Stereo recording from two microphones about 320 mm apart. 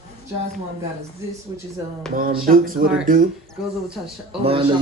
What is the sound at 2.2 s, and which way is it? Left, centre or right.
Speech, right.